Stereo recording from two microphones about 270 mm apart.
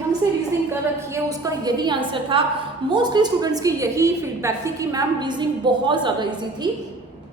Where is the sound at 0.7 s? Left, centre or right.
Centre.